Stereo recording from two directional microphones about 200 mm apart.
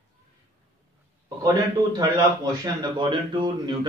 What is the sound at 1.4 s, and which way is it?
A man's voice, 20° right (ahead or behind).